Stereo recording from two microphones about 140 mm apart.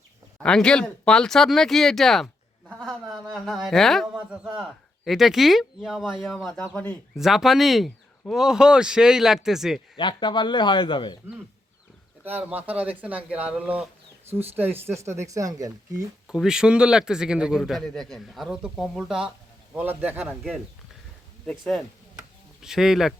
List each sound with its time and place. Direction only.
0.3 s a man's voice: 5° left (ahead or behind)
3.3 s a man's voice: centre (ahead or behind)
10.0 s speech: 35° left (ahead or behind)
12.2 s speech: 10° right (ahead or behind)
16.2 s a man's voice: 5° right (ahead or behind)
21.4 s a man's voice: centre (ahead or behind)